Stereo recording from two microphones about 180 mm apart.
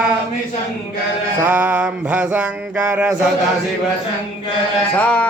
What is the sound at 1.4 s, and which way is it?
Music, 10° right (ahead or behind).